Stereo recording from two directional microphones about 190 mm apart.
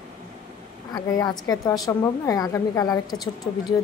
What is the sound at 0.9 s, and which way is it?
A woman's voice, 20° left (ahead or behind).